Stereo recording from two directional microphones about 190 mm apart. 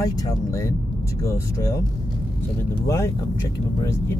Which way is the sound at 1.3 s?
15° left (ahead or behind).